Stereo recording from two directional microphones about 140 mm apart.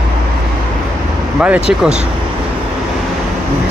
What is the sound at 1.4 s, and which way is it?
Speech, 10° right (ahead or behind).